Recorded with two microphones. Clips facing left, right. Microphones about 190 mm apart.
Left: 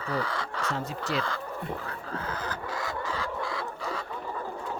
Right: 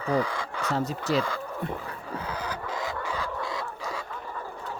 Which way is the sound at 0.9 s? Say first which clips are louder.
Right 5 dB; 40° right (ahead or behind).